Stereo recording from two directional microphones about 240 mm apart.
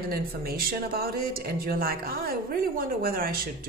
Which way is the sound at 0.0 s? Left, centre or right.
Right.